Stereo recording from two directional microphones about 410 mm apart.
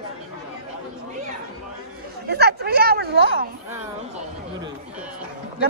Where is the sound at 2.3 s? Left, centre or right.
Right.